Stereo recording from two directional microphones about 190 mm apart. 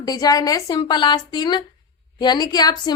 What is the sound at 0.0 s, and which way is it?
A woman's voice, 20° left (ahead or behind).